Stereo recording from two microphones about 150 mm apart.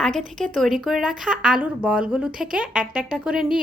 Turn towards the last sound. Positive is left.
turn(degrees=-5)  # may be behind; listen again after turning